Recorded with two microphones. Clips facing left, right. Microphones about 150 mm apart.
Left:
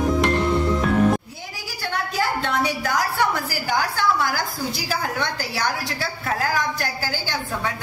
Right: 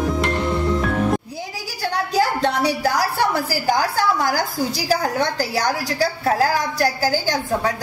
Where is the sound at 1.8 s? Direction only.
35° right (ahead or behind).